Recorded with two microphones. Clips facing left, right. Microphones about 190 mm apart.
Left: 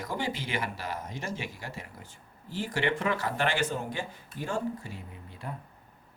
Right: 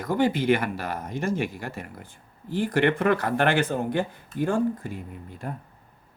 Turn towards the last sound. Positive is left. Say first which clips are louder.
# right 7 dB
turn(degrees=-50)  # may be behind; listen again after turning